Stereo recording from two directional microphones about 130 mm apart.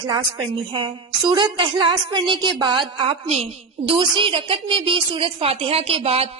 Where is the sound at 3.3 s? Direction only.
55° right (ahead or behind).